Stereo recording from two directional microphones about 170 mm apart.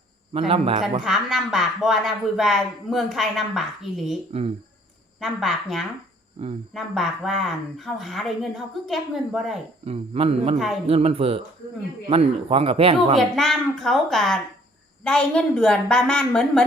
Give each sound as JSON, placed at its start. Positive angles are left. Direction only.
{"t": 0.3, "sound": "speech", "side_deg": -35}
{"t": 1.0, "sound": "speech", "side_deg": 0}
{"t": 4.3, "sound": "speech", "side_deg": -35}
{"t": 5.2, "sound": "speech", "side_deg": 0}
{"t": 9.8, "sound": "speech", "side_deg": -35}
{"t": 13.1, "sound": "speech", "side_deg": 0}